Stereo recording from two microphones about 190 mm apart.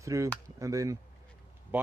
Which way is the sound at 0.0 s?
15° right (ahead or behind).